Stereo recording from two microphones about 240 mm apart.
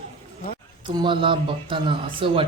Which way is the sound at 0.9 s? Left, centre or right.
Centre.